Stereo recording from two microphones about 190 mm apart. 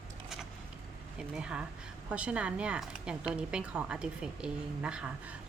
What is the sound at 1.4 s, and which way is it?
Speech, 5° right (ahead or behind).